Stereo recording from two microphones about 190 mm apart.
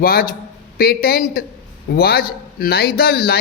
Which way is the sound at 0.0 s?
50° left (ahead or behind).